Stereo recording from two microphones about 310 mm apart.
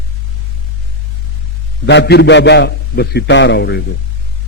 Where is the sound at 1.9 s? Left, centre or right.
Left.